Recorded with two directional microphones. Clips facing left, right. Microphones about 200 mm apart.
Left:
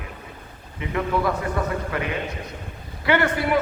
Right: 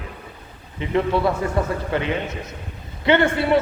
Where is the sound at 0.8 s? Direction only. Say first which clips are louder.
Right 4 dB; 30° right (ahead or behind).